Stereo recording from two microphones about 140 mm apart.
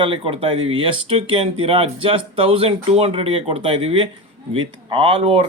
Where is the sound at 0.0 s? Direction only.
40° right (ahead or behind).